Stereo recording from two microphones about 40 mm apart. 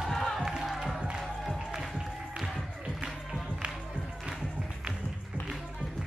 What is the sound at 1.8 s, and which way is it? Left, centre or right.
Music, centre.